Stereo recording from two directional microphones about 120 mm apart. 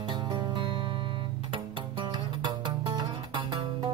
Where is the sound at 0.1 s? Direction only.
40° right (ahead or behind).